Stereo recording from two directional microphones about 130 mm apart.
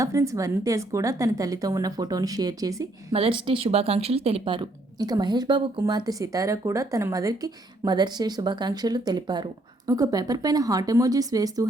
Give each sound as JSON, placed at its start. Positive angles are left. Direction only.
{"t": 0.0, "sound": "a woman's voice", "side_deg": -25}
{"t": 3.1, "sound": "a woman's voice", "side_deg": -45}